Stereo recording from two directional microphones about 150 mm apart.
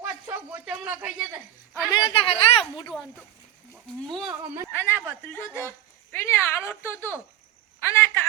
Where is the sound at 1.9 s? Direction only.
30° left (ahead or behind).